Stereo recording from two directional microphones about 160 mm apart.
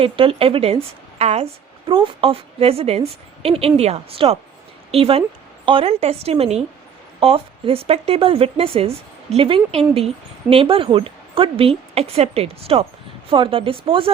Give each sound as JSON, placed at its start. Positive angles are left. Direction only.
{"t": 0.0, "sound": "speech", "side_deg": -35}